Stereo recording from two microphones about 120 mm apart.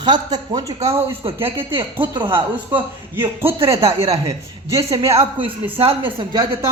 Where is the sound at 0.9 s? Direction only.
50° right (ahead or behind).